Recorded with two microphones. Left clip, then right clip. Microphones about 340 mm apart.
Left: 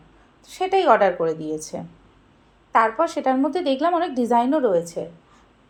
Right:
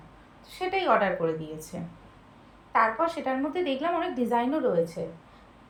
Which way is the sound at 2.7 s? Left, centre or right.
Centre.